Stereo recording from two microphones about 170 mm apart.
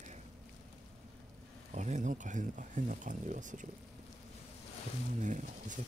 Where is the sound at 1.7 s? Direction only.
45° right (ahead or behind).